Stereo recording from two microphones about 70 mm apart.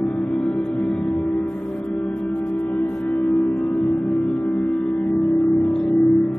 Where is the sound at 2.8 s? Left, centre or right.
Centre.